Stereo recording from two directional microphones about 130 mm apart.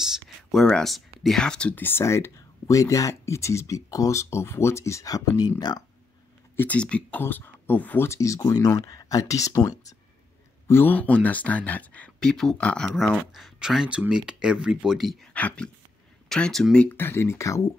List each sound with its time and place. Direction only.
0.0 s a sound: centre (ahead or behind)
1.2 s speech: 5° left (ahead or behind); by 5.9 s 30° left (ahead or behind)
6.5 s speech: 15° left (ahead or behind)
10.7 s speech: 15° left (ahead or behind); by 15.1 s centre (ahead or behind)
15.3 s speech: 10° left (ahead or behind)